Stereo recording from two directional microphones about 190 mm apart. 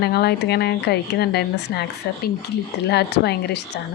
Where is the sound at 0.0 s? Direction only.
60° left (ahead or behind).